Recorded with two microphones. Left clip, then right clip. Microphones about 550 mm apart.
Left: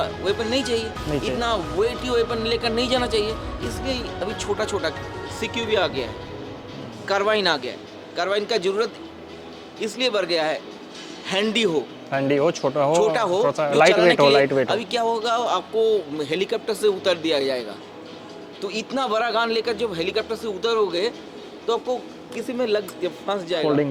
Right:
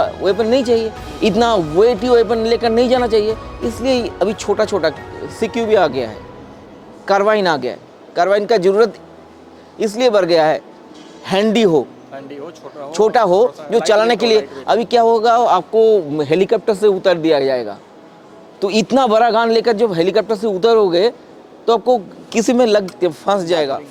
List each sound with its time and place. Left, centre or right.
0.0 s a man's voice: right
12.1 s speech: left
12.9 s speech: right
22.4 s speech: right